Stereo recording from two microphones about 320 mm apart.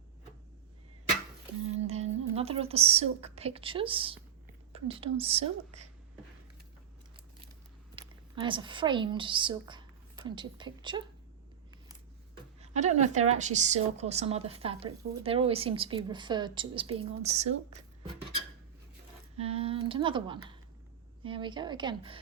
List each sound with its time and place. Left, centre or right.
1.8 s a woman's voice: centre
7.9 s speech: centre
12.5 s a woman's voice: right
19.4 s a woman's voice: centre